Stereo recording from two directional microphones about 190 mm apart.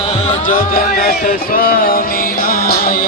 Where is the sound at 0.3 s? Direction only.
45° left (ahead or behind).